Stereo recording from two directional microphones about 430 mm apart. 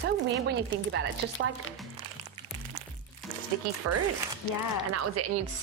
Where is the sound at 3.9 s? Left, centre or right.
Right.